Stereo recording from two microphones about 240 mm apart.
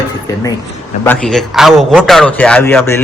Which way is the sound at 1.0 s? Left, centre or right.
Centre.